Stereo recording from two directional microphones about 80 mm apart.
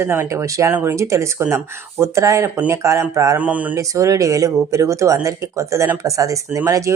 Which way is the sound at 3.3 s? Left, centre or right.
Centre.